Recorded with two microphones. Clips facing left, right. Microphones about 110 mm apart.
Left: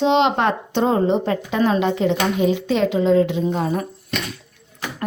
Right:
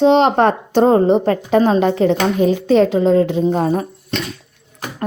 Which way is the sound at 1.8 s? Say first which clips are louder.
Right 4 dB; 45° right (ahead or behind).